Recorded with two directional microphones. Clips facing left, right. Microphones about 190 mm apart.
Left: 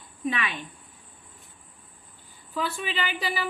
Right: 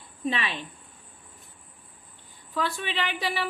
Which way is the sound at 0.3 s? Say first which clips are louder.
Even; 30° right (ahead or behind).